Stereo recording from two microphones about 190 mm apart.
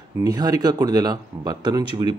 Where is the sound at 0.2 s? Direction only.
20° right (ahead or behind).